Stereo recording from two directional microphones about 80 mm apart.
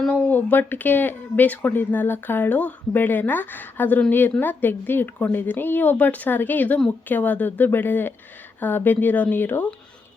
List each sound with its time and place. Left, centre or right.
0.1 s speech: centre